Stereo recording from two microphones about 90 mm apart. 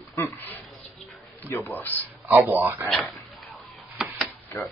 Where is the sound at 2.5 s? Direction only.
20° right (ahead or behind).